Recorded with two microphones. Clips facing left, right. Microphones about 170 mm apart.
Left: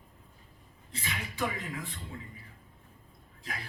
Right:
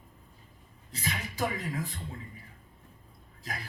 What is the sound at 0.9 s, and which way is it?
A woman's voice, 40° right (ahead or behind).